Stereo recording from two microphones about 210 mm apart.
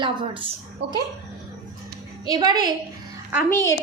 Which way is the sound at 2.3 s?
20° right (ahead or behind).